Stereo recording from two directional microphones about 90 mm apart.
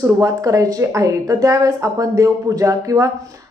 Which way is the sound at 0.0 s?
40° right (ahead or behind).